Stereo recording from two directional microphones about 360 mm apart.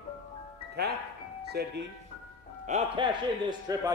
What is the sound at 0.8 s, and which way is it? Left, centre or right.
Speech, right.